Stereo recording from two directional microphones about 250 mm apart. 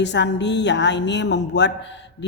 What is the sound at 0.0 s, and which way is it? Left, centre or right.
Speech, left.